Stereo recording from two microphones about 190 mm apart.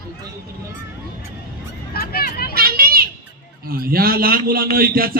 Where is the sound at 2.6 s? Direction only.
50° right (ahead or behind).